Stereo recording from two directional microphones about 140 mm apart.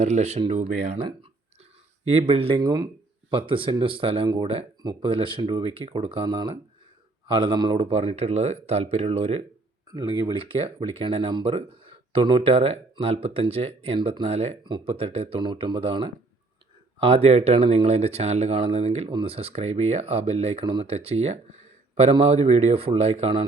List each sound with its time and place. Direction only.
0.0 s speech: 55° right (ahead or behind)
2.0 s speech: 45° right (ahead or behind)
2.6 s speech: 25° right (ahead or behind)
7.8 s speech: 45° right (ahead or behind)
9.8 s speech: 30° right (ahead or behind)
10.3 s speech: 40° right (ahead or behind)